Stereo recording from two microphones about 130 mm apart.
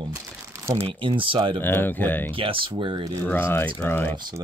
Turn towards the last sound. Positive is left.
turn(degrees=15)  # may be behind; listen again after turning